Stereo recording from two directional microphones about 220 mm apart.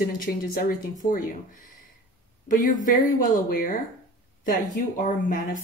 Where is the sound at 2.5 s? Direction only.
35° left (ahead or behind).